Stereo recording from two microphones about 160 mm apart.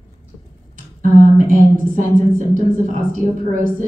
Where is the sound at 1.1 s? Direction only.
55° right (ahead or behind).